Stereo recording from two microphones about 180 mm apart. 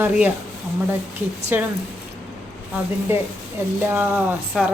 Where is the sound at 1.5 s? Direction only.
10° right (ahead or behind).